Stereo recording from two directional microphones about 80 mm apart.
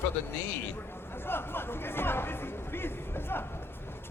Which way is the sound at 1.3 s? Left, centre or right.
Left.